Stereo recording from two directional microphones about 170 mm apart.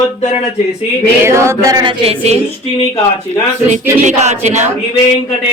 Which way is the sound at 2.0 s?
40° right (ahead or behind).